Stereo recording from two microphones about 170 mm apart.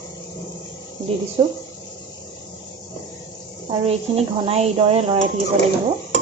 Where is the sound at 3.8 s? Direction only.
35° right (ahead or behind).